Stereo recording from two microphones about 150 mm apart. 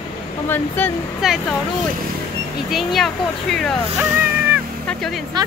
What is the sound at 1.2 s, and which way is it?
Speech, centre (ahead or behind).